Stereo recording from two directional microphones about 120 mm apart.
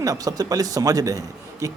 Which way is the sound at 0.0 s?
30° right (ahead or behind).